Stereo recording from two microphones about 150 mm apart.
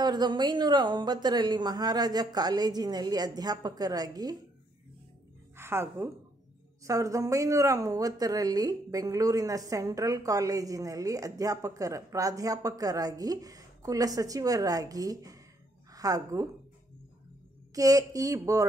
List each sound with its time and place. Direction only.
0.0 s speech: 30° right (ahead or behind)
5.6 s a woman's voice: 15° right (ahead or behind)
17.7 s speech: 25° right (ahead or behind)